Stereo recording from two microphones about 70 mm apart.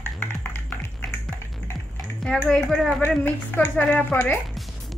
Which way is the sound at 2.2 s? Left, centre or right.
Centre.